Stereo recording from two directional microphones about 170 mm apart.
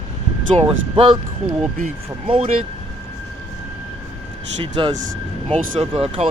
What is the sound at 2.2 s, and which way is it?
Speech, 35° right (ahead or behind).